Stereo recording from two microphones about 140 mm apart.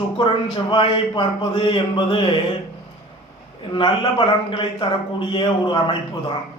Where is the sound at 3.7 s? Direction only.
40° left (ahead or behind).